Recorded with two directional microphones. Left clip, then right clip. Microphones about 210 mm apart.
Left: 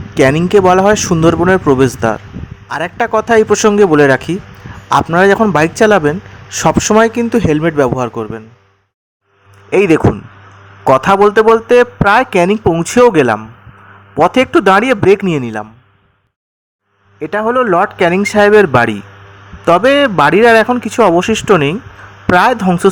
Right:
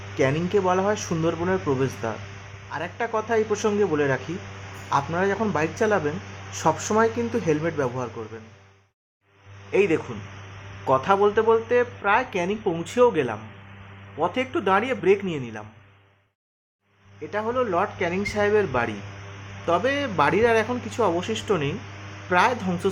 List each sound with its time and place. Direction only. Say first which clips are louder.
0.1 s a man's voice: left 13 dB; 50° left (ahead or behind)
9.7 s a man's voice: left 12 dB; 50° left (ahead or behind)
17.2 s a man's voice: left 13 dB; 45° left (ahead or behind)